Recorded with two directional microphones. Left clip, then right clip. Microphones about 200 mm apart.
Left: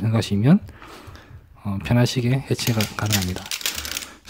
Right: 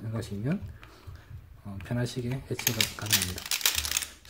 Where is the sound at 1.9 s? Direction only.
40° left (ahead or behind).